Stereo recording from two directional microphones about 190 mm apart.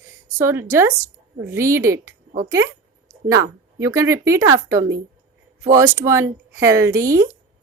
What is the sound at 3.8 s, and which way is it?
Speech, 15° right (ahead or behind).